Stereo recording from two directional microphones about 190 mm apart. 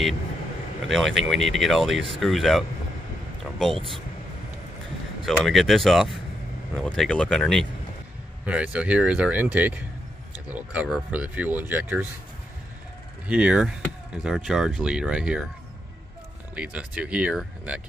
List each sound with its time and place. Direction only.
0.8 s speech: centre (ahead or behind)
3.7 s speech: 30° right (ahead or behind)
5.2 s speech: centre (ahead or behind)
13.3 s speech: 5° right (ahead or behind)
16.5 s speech: 5° right (ahead or behind)